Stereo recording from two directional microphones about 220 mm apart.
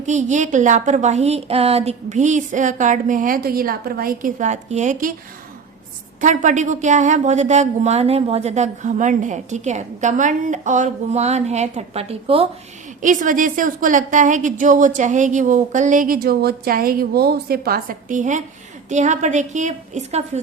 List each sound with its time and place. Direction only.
0.0 s a woman's voice: 35° right (ahead or behind)
6.1 s a woman's voice: 35° right (ahead or behind)